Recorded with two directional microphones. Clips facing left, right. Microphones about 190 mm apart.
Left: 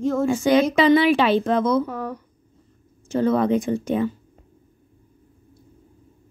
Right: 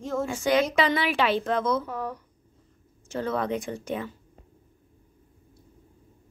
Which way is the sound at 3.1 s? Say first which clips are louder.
Left 9 dB; 25° left (ahead or behind).